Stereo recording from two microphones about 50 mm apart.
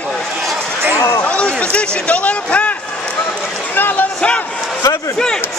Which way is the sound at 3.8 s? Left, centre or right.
Left.